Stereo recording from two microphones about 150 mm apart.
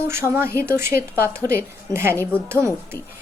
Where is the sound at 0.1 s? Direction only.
15° right (ahead or behind).